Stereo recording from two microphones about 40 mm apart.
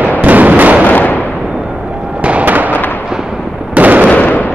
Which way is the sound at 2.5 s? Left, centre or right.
Right.